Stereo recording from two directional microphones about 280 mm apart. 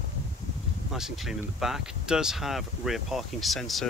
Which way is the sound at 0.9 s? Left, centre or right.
Centre.